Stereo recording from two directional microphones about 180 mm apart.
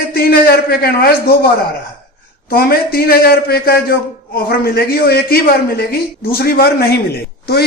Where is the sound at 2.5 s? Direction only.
55° left (ahead or behind).